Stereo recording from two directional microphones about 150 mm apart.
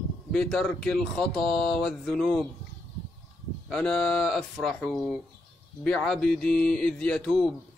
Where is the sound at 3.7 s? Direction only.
5° left (ahead or behind).